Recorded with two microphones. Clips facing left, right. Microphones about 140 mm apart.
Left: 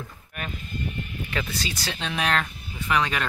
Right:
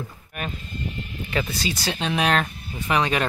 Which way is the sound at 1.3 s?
15° right (ahead or behind).